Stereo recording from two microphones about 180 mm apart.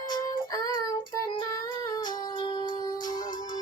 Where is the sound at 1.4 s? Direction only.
25° left (ahead or behind).